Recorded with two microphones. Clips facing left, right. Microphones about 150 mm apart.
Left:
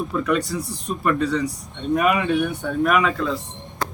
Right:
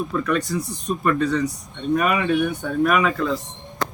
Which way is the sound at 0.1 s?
10° left (ahead or behind).